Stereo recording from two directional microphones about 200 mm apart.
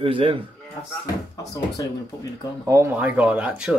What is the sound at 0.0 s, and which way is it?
Speech, 25° right (ahead or behind).